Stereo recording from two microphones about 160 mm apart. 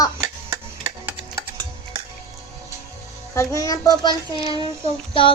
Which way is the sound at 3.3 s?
20° left (ahead or behind).